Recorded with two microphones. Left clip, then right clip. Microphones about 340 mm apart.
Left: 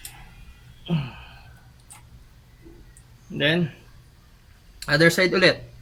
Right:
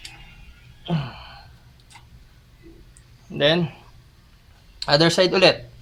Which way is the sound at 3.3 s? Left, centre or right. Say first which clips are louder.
Right 3 dB; right.